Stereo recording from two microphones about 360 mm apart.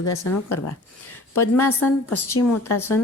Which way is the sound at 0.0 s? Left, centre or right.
Left.